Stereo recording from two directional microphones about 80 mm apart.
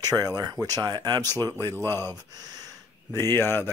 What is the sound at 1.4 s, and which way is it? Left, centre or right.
Speech, right.